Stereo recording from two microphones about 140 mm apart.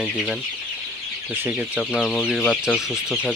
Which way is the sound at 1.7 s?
5° left (ahead or behind).